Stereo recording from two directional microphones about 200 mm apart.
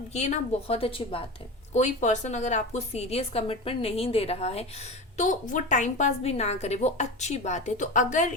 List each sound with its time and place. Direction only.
0.1 s a woman's voice: 35° left (ahead or behind)